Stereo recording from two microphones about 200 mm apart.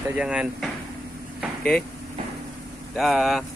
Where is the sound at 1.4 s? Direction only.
5° left (ahead or behind).